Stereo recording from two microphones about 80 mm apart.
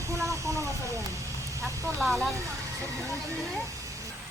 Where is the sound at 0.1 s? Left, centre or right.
Right.